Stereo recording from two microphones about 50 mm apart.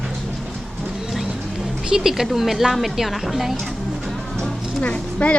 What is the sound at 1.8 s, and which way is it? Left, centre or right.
Speech, centre.